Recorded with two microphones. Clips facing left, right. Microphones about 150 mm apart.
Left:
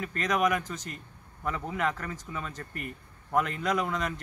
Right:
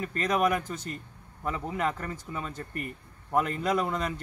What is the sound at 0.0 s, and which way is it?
Speech, 30° right (ahead or behind).